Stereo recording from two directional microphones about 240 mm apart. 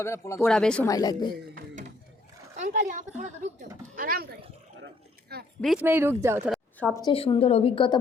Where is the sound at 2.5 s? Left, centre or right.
Right.